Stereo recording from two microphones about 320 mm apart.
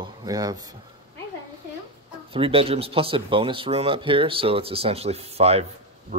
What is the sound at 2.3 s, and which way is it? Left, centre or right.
Speech, centre.